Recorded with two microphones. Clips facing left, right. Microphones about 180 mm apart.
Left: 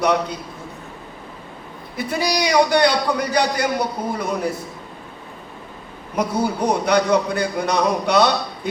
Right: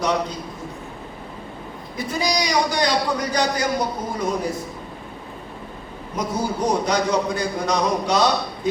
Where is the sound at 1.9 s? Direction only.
65° left (ahead or behind).